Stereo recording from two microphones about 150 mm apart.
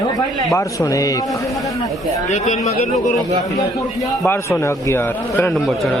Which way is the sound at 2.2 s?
55° left (ahead or behind).